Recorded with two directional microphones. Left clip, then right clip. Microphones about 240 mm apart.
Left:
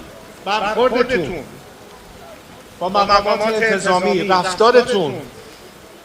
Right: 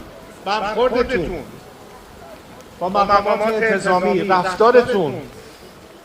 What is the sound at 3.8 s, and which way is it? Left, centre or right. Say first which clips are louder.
A man's voice: left 1 dB; left.